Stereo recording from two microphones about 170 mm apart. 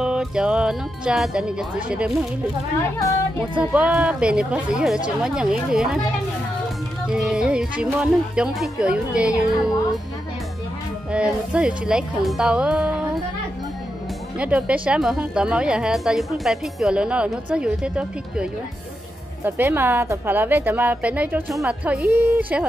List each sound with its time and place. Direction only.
0.0 s speech: 5° right (ahead or behind)
3.0 s speech: 20° left (ahead or behind)
3.5 s speech: 5° right (ahead or behind)
7.1 s speech: 5° right (ahead or behind)
11.1 s speech: 5° right (ahead or behind)
14.4 s a woman's voice: 5° right (ahead or behind)